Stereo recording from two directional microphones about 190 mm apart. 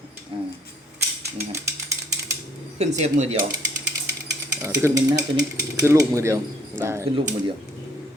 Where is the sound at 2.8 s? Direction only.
35° right (ahead or behind).